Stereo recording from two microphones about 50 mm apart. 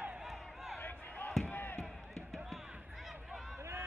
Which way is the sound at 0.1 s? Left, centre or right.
Centre.